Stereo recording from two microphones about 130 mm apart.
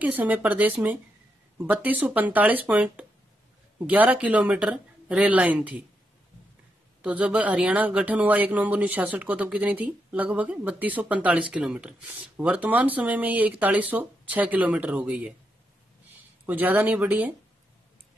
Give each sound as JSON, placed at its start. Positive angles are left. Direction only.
{"t": 0.0, "sound": "speech", "side_deg": -10}
{"t": 7.0, "sound": "speech", "side_deg": -10}
{"t": 16.4, "sound": "speech", "side_deg": -15}